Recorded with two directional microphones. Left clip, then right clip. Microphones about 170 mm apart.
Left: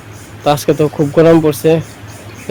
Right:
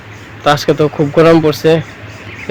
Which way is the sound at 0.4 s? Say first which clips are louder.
Right 1 dB; 15° left (ahead or behind).